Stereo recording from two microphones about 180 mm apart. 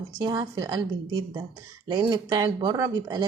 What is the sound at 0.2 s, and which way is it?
Speech, 20° right (ahead or behind).